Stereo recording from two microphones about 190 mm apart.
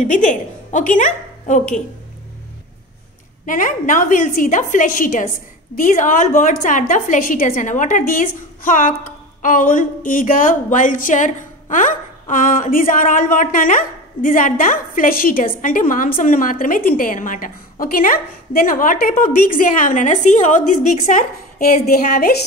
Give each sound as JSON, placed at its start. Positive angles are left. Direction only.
{"t": 0.0, "sound": "a woman's voice", "side_deg": 40}
{"t": 3.4, "sound": "speech", "side_deg": 45}